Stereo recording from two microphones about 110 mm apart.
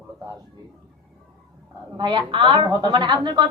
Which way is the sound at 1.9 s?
45° right (ahead or behind).